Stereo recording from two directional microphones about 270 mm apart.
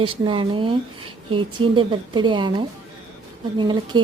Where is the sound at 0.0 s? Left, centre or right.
Centre.